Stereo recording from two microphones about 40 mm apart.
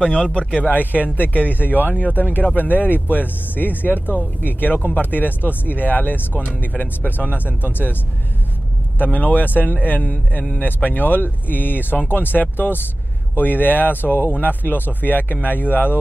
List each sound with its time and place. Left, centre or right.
0.0 s speech: left
0.7 s speech: left